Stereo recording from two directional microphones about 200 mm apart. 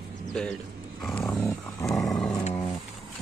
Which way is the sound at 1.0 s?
Centre (ahead or behind).